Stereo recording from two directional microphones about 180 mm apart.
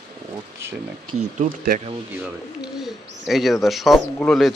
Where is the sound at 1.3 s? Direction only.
50° right (ahead or behind).